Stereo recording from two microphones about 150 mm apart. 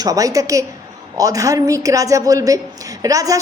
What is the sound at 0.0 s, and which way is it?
A woman's voice, 25° right (ahead or behind).